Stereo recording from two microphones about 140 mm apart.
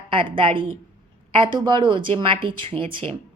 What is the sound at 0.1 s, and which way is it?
A woman's voice, 40° right (ahead or behind).